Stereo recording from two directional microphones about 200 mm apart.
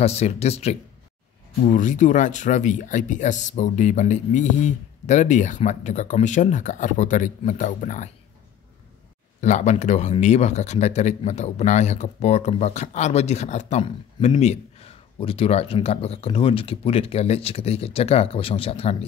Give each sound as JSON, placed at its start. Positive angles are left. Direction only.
{"t": 0.0, "sound": "a man's voice", "side_deg": 30}
{"t": 9.4, "sound": "a man's voice", "side_deg": 35}